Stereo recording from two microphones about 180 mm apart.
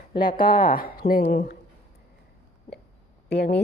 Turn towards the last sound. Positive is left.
turn(degrees=65)  # may be behind; listen again after turning